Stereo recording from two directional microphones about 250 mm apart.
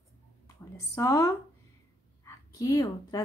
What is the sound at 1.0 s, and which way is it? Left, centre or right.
Speech, centre.